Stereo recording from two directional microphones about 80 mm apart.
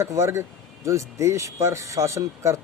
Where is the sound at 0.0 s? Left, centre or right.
Right.